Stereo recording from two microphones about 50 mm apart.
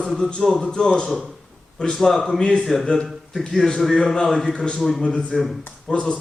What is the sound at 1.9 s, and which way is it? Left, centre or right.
Speech, centre.